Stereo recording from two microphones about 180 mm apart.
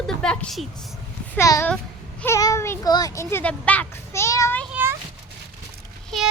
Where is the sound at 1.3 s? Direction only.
15° left (ahead or behind).